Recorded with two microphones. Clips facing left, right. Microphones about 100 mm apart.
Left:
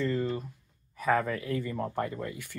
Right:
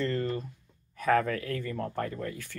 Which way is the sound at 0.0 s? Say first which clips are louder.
Even; 5° left (ahead or behind).